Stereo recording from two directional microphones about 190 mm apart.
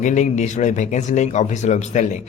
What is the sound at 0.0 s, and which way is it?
Speech, 40° left (ahead or behind).